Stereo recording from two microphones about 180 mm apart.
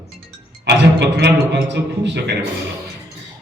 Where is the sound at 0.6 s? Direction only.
70° right (ahead or behind).